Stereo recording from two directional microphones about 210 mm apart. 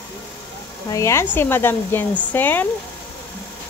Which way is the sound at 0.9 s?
15° left (ahead or behind).